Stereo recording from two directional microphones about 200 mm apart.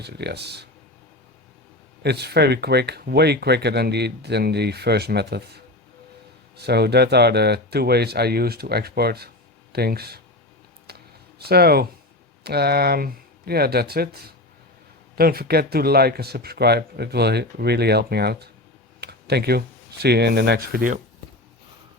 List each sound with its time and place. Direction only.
0.0 s speech: 55° right (ahead or behind)
2.0 s speech: 55° right (ahead or behind)
6.6 s speech: 55° right (ahead or behind)
10.8 s a sound: 55° right (ahead or behind)
12.4 s speech: 55° right (ahead or behind)